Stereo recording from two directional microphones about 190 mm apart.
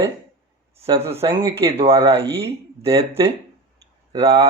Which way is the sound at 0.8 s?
30° right (ahead or behind).